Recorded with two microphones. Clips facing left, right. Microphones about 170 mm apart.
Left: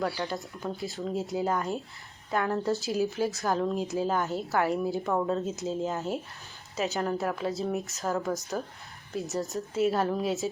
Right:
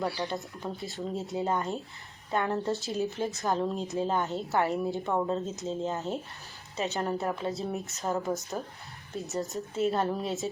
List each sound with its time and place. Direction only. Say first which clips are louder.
0.1 s speech: even; centre (ahead or behind)
5.1 s speech: left 1 dB; 20° right (ahead or behind)
5.5 s speech: left 2 dB; 5° left (ahead or behind)